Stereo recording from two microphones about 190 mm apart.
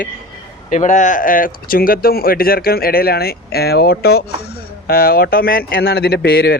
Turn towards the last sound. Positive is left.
turn(degrees=55)  # may be behind; listen again after turning